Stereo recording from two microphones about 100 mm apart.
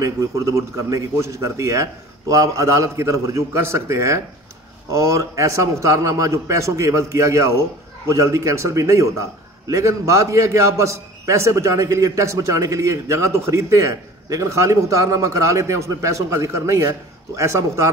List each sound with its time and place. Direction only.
0.0 s a man's voice: 30° right (ahead or behind)